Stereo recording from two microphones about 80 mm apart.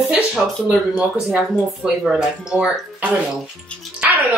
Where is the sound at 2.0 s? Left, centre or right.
Centre.